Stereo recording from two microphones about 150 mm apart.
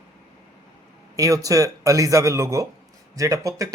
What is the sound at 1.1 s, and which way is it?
A man's voice, 20° right (ahead or behind).